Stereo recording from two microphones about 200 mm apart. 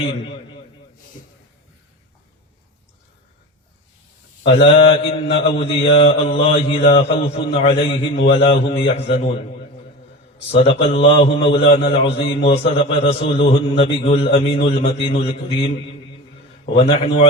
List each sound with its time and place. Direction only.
4.6 s a man's voice: 25° left (ahead or behind)
10.5 s a man's voice: 30° left (ahead or behind)
16.7 s a man's voice: 30° left (ahead or behind)